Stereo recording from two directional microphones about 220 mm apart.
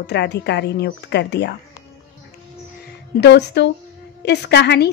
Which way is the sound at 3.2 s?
50° left (ahead or behind).